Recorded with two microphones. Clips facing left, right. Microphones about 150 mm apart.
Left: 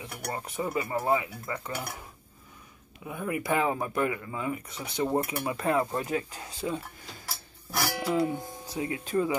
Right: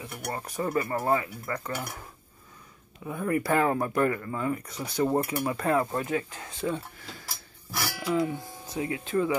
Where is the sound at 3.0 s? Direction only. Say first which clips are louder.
Right 4 dB; 10° left (ahead or behind).